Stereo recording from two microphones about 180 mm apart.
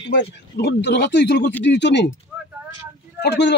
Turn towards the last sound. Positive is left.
turn(degrees=70)  # may be behind; listen again after turning